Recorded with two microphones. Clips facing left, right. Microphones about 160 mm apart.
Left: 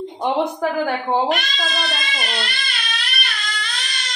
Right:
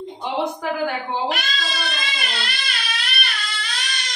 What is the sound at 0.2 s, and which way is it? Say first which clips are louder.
Speech: left 5 dB; 55° left (ahead or behind).